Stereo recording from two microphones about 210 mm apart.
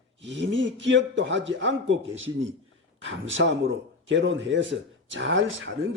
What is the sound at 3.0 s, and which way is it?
Speech, 65° right (ahead or behind).